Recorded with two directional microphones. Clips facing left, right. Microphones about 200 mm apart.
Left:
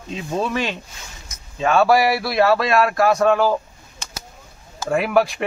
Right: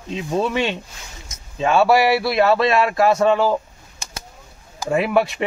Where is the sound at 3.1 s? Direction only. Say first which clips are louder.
Even; centre (ahead or behind).